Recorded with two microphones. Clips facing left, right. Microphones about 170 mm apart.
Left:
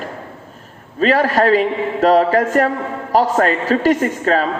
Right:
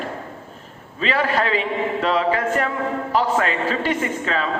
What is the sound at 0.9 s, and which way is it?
A man's voice, 45° left (ahead or behind).